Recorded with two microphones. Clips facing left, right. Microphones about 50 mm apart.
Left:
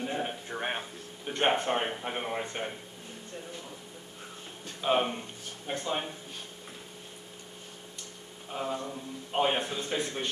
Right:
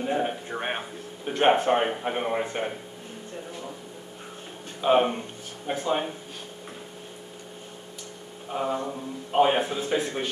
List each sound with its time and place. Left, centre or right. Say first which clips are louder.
0.0 s speech: right 7 dB; centre
0.5 s speech: right 3 dB; right
1.2 s speech: right 7 dB; centre
4.8 s speech: right 6 dB; centre
8.5 s a sound: right 6 dB; centre
8.7 s mantra: right 6 dB; right
9.3 s speech: right 7 dB; centre